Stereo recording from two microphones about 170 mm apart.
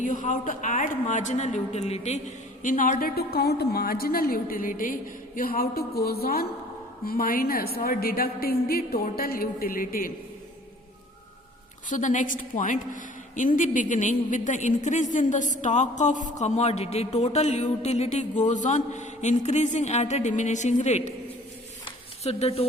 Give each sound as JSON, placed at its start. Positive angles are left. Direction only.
{"t": 0.0, "sound": "a woman's voice", "side_deg": 50}
{"t": 11.9, "sound": "speech", "side_deg": 50}
{"t": 21.8, "sound": "a sound", "side_deg": 40}